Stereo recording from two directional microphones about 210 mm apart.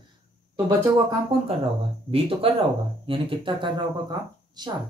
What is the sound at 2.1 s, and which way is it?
Speech, 25° right (ahead or behind).